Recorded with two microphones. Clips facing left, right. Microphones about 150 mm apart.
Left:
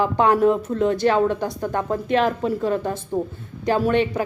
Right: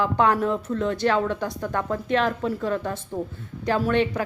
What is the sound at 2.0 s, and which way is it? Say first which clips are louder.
Speech: left 3 dB; 10° left (ahead or behind).